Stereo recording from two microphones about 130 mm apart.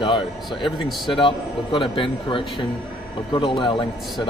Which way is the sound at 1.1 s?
40° left (ahead or behind).